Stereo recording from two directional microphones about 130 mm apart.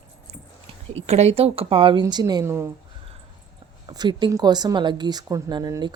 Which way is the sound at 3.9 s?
35° right (ahead or behind).